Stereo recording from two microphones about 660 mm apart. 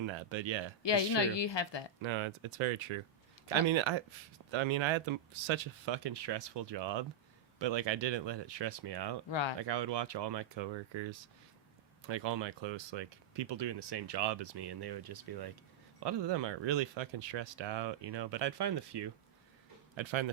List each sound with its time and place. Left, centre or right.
0.0 s speech: right
0.8 s a woman's voice: left
2.0 s speech: right
9.3 s speech: left
9.6 s speech: right